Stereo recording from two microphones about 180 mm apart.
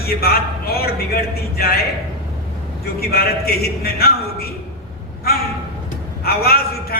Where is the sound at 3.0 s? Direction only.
60° left (ahead or behind).